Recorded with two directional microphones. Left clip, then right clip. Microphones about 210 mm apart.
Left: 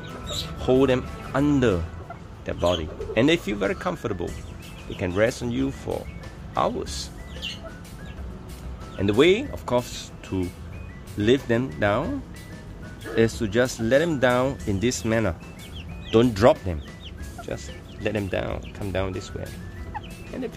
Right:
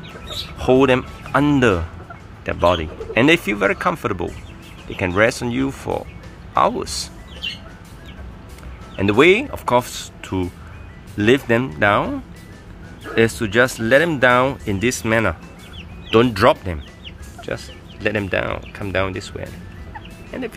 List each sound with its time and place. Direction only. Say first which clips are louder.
0.6 s speech: right 6 dB; centre (ahead or behind)
8.9 s speech: right 6 dB; centre (ahead or behind)
16.3 s speech: right 3 dB; 15° left (ahead or behind)
17.5 s speech: right 7 dB; 5° left (ahead or behind)
20.2 s music: right 6 dB; centre (ahead or behind)